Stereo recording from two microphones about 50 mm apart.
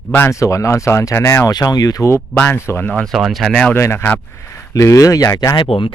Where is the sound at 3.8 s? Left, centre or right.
Left.